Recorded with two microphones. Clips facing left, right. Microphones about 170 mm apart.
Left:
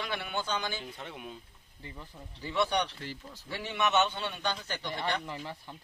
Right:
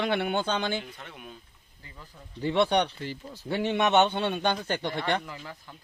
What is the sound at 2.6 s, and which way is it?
Speech, 60° right (ahead or behind).